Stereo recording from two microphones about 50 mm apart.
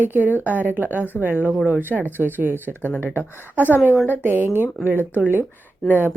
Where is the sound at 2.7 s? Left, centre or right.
Left.